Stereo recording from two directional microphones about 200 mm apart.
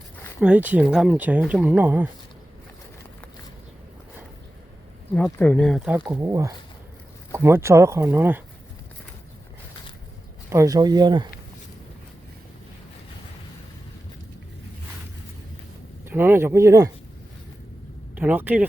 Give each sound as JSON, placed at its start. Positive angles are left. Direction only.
{"t": 0.3, "sound": "speech", "side_deg": -5}
{"t": 5.1, "sound": "speech", "side_deg": 5}
{"t": 6.1, "sound": "speech", "side_deg": -15}
{"t": 10.5, "sound": "speech", "side_deg": -15}
{"t": 16.0, "sound": "speech", "side_deg": -10}
{"t": 18.1, "sound": "speech", "side_deg": -10}